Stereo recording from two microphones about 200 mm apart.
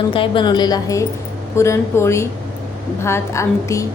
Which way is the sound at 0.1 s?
25° left (ahead or behind).